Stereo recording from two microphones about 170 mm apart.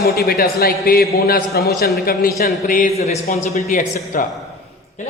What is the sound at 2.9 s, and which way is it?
A man's voice, 40° left (ahead or behind).